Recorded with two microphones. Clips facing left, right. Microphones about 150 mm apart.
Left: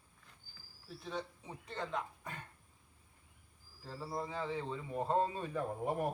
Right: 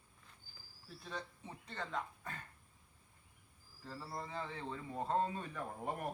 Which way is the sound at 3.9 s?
15° left (ahead or behind).